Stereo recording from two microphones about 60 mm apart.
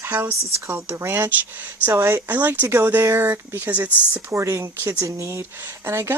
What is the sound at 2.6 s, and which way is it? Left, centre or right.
Speech, right.